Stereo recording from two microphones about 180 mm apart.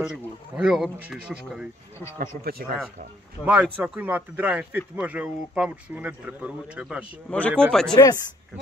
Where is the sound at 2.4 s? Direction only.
55° right (ahead or behind).